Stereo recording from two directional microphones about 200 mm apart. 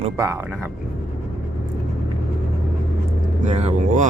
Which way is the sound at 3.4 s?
35° right (ahead or behind).